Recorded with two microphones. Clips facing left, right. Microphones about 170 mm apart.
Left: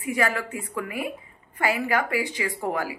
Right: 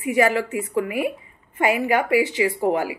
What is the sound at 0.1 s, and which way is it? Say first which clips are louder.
A woman's voice: right 6 dB; 20° right (ahead or behind).